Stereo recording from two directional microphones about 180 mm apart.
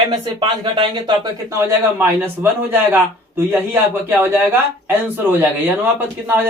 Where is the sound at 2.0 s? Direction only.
10° right (ahead or behind).